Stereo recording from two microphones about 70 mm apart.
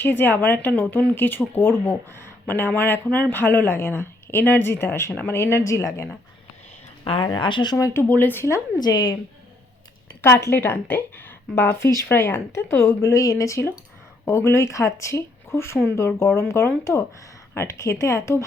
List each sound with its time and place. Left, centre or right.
0.0 s a woman's voice: left
7.3 s speech: left
7.9 s speech: left
8.8 s a woman's voice: left
10.2 s a woman's voice: left
12.8 s speech: left